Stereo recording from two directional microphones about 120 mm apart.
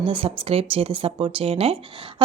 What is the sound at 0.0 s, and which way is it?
Speech, 50° right (ahead or behind).